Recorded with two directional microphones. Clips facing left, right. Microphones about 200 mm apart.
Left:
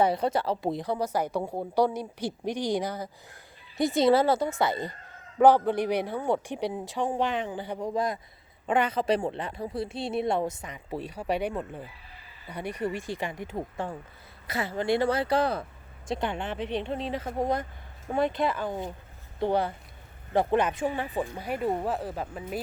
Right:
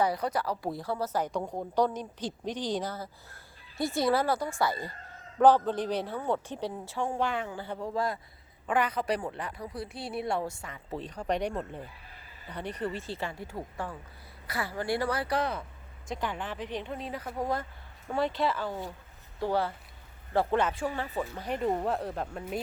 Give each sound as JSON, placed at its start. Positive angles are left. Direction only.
{"t": 0.0, "sound": "speech", "side_deg": 25}